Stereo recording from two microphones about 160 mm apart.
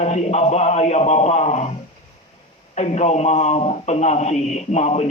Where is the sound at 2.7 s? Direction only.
45° left (ahead or behind).